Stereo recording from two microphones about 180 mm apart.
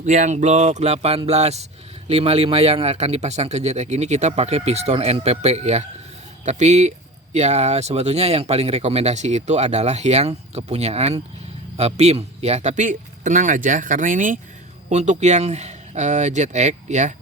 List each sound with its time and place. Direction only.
0.0 s speech: 40° right (ahead or behind)